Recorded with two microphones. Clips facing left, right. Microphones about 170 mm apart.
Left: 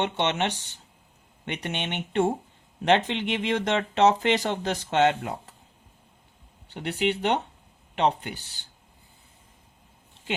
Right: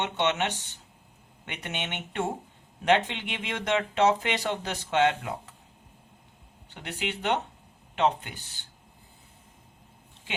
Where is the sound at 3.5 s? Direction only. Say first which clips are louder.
Right 1 dB; 35° left (ahead or behind).